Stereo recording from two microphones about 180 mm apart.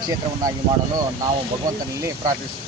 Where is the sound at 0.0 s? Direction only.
20° right (ahead or behind).